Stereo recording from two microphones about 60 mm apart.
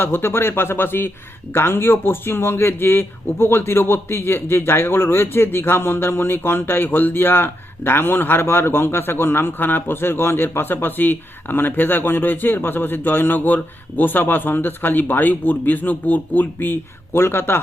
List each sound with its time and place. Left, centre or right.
0.0 s speech: left
17.2 s speech: left